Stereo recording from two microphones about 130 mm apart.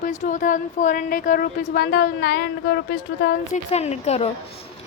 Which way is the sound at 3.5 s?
60° left (ahead or behind).